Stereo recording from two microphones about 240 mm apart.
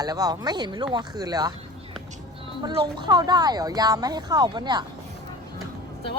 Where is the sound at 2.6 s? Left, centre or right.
Centre.